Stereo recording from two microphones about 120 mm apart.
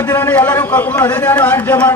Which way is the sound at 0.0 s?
15° left (ahead or behind).